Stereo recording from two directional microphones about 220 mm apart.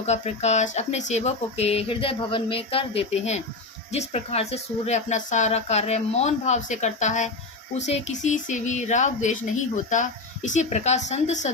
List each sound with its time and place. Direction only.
0.0 s speech: 30° left (ahead or behind)